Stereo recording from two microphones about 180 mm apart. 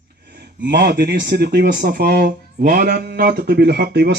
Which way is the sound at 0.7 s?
60° right (ahead or behind).